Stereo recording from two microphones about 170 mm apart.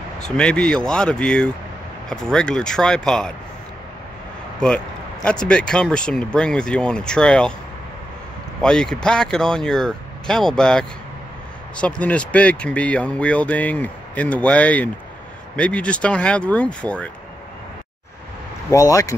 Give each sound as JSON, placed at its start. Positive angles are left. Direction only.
{"t": 0.2, "sound": "speech", "side_deg": 5}
{"t": 4.6, "sound": "speech", "side_deg": 5}
{"t": 8.5, "sound": "speech", "side_deg": 5}
{"t": 18.7, "sound": "speech", "side_deg": 20}